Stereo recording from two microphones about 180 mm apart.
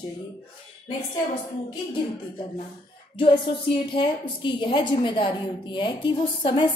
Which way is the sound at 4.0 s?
25° left (ahead or behind).